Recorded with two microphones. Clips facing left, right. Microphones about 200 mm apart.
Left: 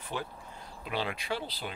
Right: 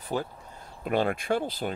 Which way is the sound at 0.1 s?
40° right (ahead or behind).